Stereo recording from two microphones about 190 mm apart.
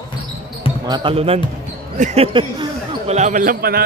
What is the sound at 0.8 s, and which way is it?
Speech, 25° right (ahead or behind).